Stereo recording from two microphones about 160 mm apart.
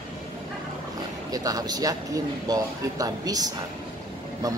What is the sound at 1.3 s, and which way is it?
Speech, 25° right (ahead or behind).